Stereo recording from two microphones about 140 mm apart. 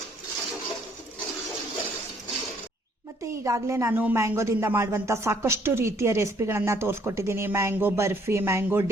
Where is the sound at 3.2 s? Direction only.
20° right (ahead or behind).